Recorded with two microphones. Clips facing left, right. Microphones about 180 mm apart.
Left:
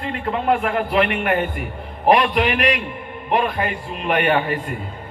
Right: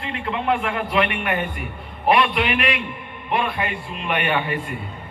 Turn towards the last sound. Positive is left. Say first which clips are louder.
# left 4 dB
turn(degrees=40)  # may be behind; listen again after turning